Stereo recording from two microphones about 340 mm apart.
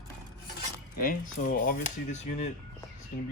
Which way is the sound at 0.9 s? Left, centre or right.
Left.